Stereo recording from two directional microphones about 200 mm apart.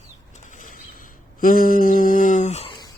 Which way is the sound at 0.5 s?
40° left (ahead or behind).